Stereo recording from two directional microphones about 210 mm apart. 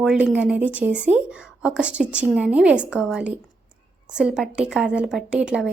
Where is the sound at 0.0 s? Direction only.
Centre (ahead or behind).